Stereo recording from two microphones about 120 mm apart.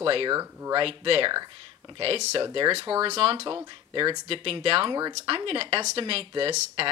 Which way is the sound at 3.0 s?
50° right (ahead or behind).